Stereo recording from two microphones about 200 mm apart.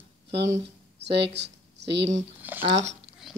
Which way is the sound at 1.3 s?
60° right (ahead or behind).